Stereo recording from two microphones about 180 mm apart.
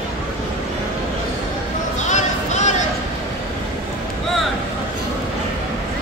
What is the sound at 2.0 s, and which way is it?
Music, 40° left (ahead or behind).